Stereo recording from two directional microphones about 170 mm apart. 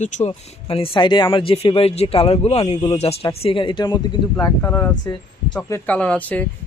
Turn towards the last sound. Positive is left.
turn(degrees=10)  # may be behind; listen again after turning